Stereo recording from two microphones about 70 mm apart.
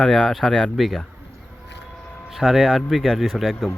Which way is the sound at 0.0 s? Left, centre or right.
Centre.